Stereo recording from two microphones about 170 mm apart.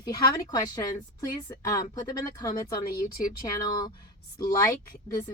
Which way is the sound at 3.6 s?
25° left (ahead or behind).